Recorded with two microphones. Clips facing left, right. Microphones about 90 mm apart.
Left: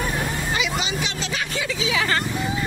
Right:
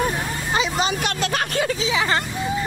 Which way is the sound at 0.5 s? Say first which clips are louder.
Right 3 dB; 35° right (ahead or behind).